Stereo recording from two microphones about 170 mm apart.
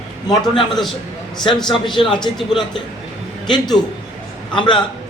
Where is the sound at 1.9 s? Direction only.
30° left (ahead or behind).